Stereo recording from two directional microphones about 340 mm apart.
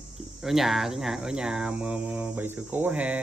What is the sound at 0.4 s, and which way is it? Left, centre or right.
Speech, centre.